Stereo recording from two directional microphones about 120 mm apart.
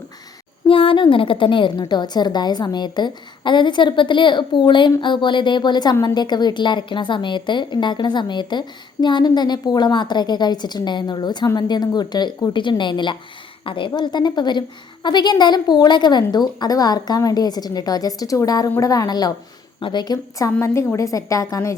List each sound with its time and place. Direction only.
0.7 s a woman's voice: 45° left (ahead or behind)
20.6 s a woman's voice: 25° left (ahead or behind)